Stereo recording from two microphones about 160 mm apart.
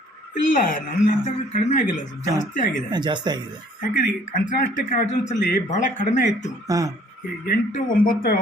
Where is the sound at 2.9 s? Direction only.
30° right (ahead or behind).